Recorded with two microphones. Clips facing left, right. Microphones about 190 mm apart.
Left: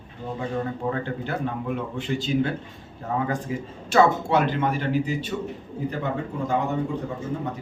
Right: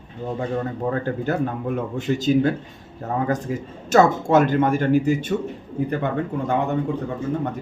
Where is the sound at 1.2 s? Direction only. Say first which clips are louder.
Right 5 dB; 45° right (ahead or behind).